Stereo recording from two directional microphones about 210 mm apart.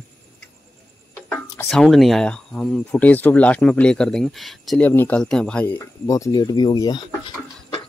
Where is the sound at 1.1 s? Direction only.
5° left (ahead or behind).